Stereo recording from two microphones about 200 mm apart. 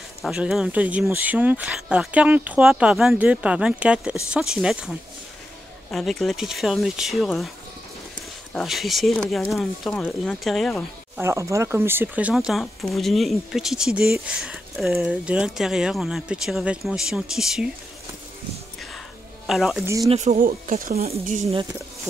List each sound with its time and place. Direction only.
0.2 s speech: 5° right (ahead or behind)
8.5 s speech: centre (ahead or behind)
11.1 s speech: 15° right (ahead or behind)
19.4 s speech: centre (ahead or behind)
20.1 s speech: 35° right (ahead or behind)